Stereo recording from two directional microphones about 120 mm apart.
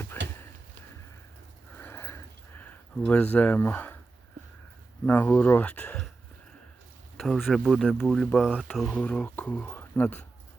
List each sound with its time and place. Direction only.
0.1 s a sound: 20° left (ahead or behind)
1.8 s sniff: 20° left (ahead or behind)
5.0 s speech: 15° left (ahead or behind)
7.2 s speech: centre (ahead or behind)
8.9 s speech: 10° left (ahead or behind)